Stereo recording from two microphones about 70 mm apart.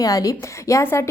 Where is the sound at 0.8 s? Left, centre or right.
Left.